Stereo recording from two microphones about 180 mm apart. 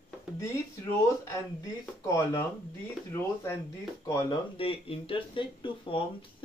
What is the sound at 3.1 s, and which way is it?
Speech, 15° left (ahead or behind).